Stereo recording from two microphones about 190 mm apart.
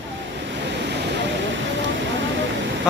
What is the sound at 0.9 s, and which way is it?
Vehicle, 70° right (ahead or behind).